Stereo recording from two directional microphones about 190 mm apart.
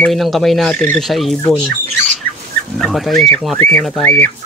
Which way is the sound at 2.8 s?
Centre (ahead or behind).